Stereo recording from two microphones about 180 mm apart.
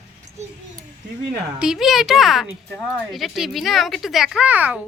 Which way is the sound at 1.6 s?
5° right (ahead or behind).